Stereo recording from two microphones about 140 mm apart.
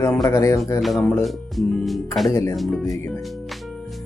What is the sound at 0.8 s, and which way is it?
Speech, centre (ahead or behind).